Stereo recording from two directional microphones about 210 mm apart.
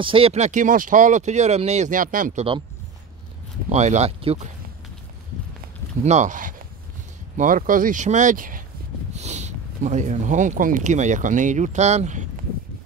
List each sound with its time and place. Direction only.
0.0 s speech: 25° right (ahead or behind)
3.6 s speech: 35° right (ahead or behind)
6.0 s speech: 35° right (ahead or behind)